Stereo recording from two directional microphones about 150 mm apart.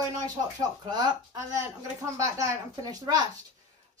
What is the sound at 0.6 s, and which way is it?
Speech, 25° right (ahead or behind).